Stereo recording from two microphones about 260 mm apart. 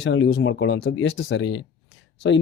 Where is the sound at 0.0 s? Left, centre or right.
Left.